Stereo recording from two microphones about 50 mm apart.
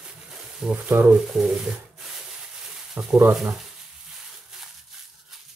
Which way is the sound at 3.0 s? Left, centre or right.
Right.